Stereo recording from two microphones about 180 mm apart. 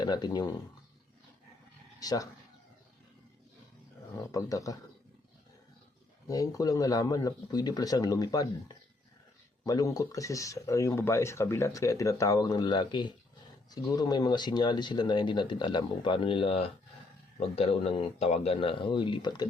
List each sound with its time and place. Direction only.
0.0 s speech: 25° left (ahead or behind)
2.0 s speech: 20° left (ahead or behind)
4.3 s speech: 20° left (ahead or behind)
6.2 s speech: 20° left (ahead or behind)